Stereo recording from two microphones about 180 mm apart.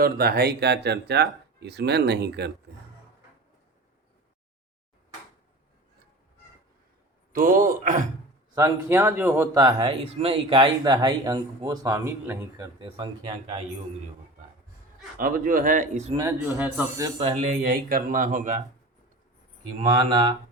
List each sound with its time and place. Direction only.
0.0 s speech: 60° right (ahead or behind)
7.3 s speech: 50° right (ahead or behind)
8.5 s speech: 15° right (ahead or behind)
12.8 s speech: 25° right (ahead or behind)
15.2 s speech: 50° right (ahead or behind)
16.1 s speech: 15° right (ahead or behind)
17.2 s speech: 40° right (ahead or behind)
20.0 s speech: 25° right (ahead or behind)